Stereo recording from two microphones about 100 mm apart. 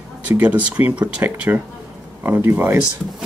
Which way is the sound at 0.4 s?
15° right (ahead or behind).